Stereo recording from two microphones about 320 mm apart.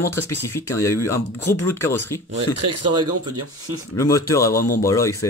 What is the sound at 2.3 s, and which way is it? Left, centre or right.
Speech, right.